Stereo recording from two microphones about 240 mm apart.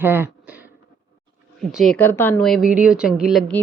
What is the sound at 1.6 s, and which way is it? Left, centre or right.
A woman's voice, centre.